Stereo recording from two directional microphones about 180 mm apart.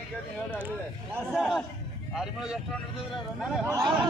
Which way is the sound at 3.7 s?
20° right (ahead or behind).